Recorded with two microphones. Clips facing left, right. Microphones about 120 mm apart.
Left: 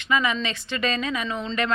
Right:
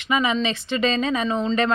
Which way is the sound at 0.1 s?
20° right (ahead or behind).